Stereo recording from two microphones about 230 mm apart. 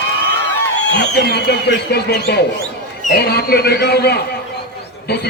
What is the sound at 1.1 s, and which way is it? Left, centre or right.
A man's voice, left.